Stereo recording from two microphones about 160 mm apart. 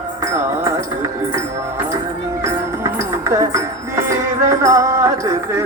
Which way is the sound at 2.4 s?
15° right (ahead or behind).